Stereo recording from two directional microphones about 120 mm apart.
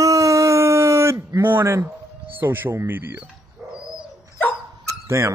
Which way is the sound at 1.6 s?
20° right (ahead or behind).